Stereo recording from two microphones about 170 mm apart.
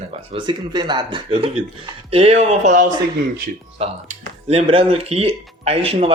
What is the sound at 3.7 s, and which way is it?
Speech, 35° right (ahead or behind).